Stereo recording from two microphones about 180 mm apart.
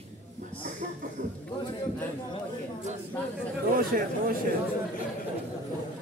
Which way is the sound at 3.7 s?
50° right (ahead or behind).